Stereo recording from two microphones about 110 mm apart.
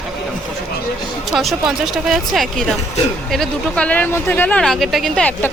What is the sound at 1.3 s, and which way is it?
Speech, centre (ahead or behind).